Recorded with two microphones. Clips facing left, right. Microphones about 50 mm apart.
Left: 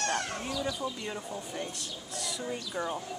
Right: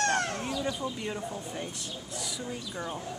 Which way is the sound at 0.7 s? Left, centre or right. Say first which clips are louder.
Right 1 dB; centre.